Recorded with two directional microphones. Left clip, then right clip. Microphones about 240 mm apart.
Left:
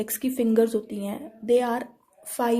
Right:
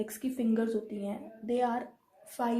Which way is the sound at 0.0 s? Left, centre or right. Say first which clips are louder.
Left 8 dB; left.